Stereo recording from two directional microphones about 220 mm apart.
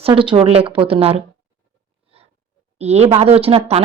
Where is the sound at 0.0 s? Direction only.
25° right (ahead or behind).